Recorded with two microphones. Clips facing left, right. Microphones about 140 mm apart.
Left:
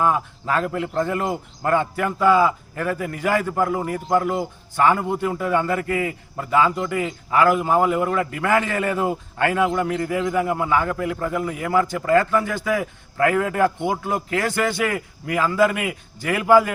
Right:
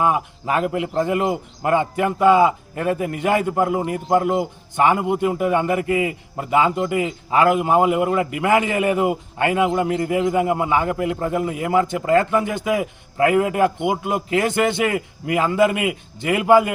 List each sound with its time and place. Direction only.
0.0 s speech: 20° right (ahead or behind)